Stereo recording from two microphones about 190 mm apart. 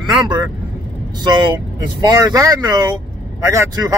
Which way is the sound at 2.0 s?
20° right (ahead or behind).